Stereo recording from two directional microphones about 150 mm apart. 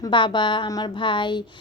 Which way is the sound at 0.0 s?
30° left (ahead or behind).